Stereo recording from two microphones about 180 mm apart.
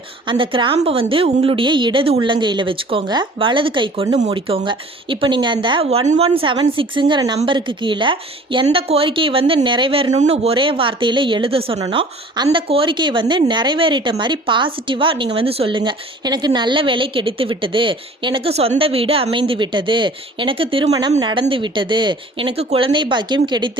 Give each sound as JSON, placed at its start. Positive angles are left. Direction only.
{"t": 0.3, "sound": "speech", "side_deg": -25}